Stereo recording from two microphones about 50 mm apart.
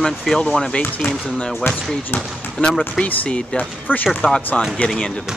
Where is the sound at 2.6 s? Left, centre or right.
Left.